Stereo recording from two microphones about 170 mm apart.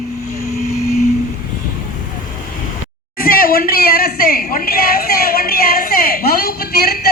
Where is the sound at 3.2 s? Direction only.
55° left (ahead or behind).